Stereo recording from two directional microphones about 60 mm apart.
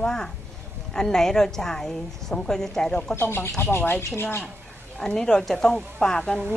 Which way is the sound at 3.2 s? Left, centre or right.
Left.